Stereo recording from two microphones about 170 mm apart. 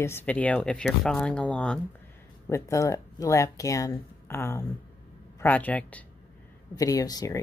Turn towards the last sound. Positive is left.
turn(degrees=20)  # may be behind; listen again after turning